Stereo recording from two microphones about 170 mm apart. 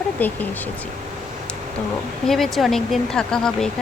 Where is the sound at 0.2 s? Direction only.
10° left (ahead or behind).